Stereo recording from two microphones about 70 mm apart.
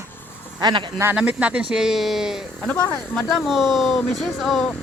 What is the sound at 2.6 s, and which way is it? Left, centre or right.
Speech, centre.